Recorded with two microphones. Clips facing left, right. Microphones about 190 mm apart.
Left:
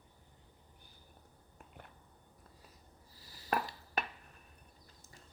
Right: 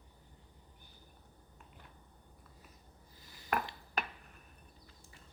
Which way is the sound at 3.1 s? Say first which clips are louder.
Even; 35° left (ahead or behind).